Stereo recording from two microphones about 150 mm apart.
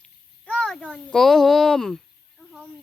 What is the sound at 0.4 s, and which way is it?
A child's voice, 5° left (ahead or behind).